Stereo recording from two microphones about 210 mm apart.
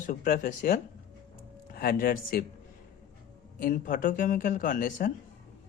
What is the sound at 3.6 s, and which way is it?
Speech, 40° left (ahead or behind).